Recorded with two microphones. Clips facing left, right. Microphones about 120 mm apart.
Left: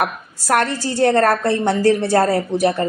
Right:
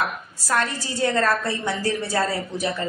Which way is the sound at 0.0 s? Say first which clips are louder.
Left 5 dB; 65° left (ahead or behind).